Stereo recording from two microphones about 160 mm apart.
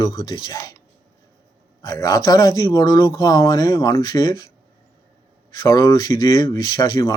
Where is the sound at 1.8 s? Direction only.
20° left (ahead or behind).